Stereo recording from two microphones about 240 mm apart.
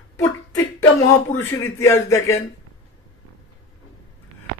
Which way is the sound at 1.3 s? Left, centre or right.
Centre.